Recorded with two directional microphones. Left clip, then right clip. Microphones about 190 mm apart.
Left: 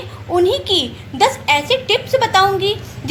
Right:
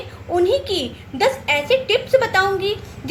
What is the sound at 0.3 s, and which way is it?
A child's voice, 20° left (ahead or behind).